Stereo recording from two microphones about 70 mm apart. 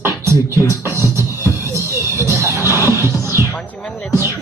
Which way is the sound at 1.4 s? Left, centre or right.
Right.